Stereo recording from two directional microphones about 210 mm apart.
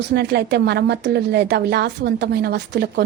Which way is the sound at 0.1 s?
50° right (ahead or behind).